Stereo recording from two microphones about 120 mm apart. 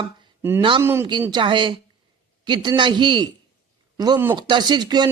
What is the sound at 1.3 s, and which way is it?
A man's voice, 40° right (ahead or behind).